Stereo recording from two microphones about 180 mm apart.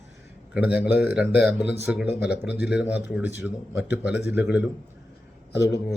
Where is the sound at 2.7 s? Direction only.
5° right (ahead or behind).